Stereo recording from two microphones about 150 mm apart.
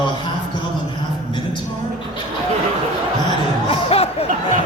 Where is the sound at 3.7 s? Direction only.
40° left (ahead or behind).